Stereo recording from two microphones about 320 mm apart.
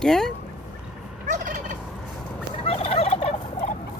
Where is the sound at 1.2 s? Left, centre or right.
Right.